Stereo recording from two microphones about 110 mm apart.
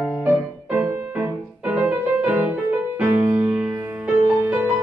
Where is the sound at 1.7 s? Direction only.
15° right (ahead or behind).